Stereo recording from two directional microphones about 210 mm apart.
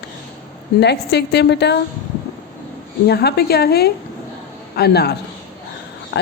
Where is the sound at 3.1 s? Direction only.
50° left (ahead or behind).